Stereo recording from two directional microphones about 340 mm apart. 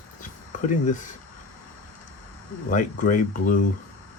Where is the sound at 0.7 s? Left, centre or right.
Left.